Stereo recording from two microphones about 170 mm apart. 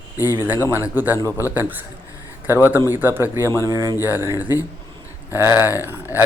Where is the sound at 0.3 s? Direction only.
10° right (ahead or behind).